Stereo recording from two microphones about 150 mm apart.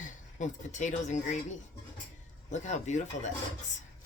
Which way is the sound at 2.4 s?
50° left (ahead or behind).